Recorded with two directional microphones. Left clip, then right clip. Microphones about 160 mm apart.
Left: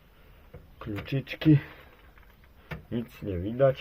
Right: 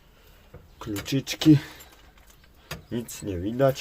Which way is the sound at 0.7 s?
25° right (ahead or behind).